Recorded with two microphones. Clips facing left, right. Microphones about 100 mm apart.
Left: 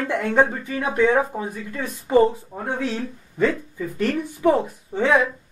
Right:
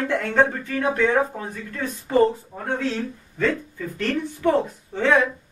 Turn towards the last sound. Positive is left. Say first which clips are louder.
# even
turn(degrees=10)  # may be behind; listen again after turning